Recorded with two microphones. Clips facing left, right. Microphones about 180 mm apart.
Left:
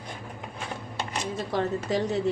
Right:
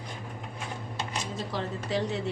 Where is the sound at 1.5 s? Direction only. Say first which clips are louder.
Left 6 dB; 50° left (ahead or behind).